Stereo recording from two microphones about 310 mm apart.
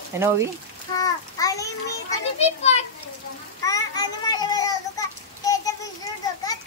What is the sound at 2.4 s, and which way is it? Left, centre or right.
Children playing, left.